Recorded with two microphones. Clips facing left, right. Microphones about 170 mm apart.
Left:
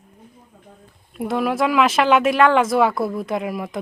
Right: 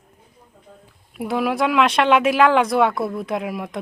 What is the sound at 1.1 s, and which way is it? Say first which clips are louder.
Speech: even; centre (ahead or behind).